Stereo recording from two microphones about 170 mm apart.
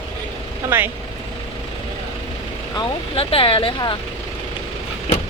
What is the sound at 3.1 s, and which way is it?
Speech, 35° left (ahead or behind).